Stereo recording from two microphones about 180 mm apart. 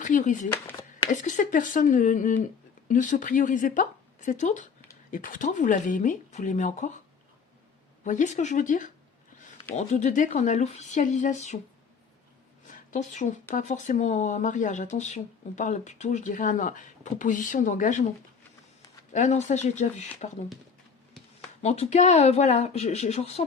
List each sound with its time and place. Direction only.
0.0 s speech: 45° left (ahead or behind)
0.5 s a sound: 20° left (ahead or behind)
1.1 s speech: 45° left (ahead or behind)
8.0 s speech: 40° left (ahead or behind)
12.6 s a sound: 45° left (ahead or behind)
13.5 s speech: 40° left (ahead or behind)
19.1 s speech: 40° left (ahead or behind)
21.6 s speech: 40° left (ahead or behind)